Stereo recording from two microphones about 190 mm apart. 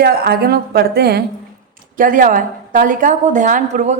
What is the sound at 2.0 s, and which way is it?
A woman's voice, 45° right (ahead or behind).